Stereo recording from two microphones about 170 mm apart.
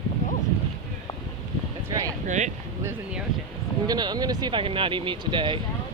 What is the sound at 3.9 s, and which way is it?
Speech, 25° right (ahead or behind).